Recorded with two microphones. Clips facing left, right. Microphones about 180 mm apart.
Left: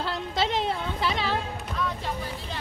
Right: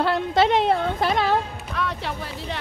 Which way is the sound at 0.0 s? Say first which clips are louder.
Right 8 dB; 60° right (ahead or behind).